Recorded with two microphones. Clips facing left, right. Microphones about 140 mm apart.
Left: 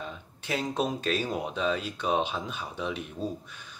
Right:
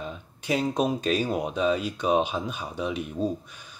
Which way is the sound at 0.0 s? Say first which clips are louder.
Right 3 dB; 15° right (ahead or behind).